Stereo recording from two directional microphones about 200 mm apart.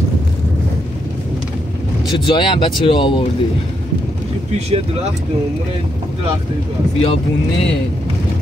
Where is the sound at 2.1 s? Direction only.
25° left (ahead or behind).